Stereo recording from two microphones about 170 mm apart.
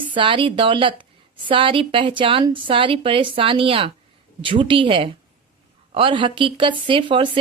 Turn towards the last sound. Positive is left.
turn(degrees=-30)  # may be behind; listen again after turning